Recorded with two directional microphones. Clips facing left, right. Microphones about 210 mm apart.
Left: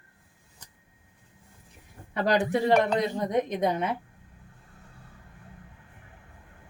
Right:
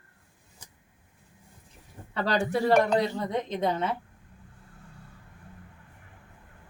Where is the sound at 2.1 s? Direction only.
15° left (ahead or behind).